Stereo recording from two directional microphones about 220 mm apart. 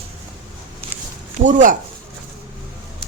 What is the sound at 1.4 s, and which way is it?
Speech, 35° right (ahead or behind).